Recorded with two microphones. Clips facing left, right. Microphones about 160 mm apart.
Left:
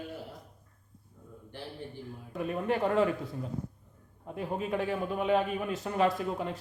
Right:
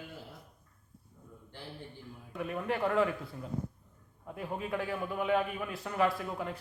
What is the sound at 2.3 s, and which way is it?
A man's voice, 25° left (ahead or behind).